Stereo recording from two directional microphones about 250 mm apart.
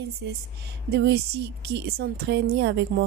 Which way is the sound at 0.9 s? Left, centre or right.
Right.